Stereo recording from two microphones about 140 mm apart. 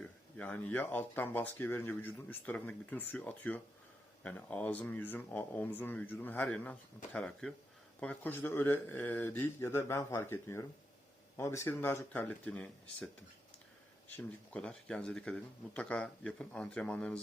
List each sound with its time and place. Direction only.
0.3 s speech: 10° left (ahead or behind)
14.1 s speech: 10° left (ahead or behind)